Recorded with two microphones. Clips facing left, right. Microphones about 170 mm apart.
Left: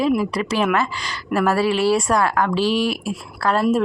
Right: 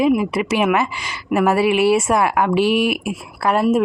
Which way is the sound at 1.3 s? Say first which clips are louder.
Right 3 dB; 20° right (ahead or behind).